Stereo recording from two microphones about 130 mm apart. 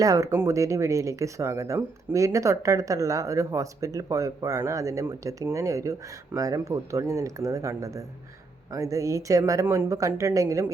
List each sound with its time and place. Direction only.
0.0 s speech: 25° right (ahead or behind)